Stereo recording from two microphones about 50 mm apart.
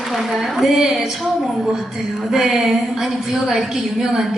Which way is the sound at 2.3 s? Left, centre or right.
Centre.